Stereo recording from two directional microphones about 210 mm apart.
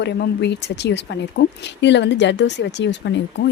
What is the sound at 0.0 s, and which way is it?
Speech, 55° left (ahead or behind).